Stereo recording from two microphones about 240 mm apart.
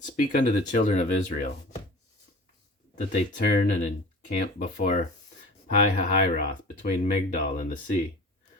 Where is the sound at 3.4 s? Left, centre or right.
Left.